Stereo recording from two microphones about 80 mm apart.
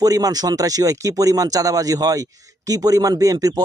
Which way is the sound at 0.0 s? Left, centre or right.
Right.